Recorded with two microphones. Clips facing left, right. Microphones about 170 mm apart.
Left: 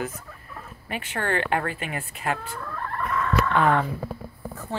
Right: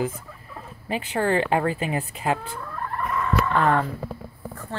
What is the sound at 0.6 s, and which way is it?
Speech, 30° right (ahead or behind).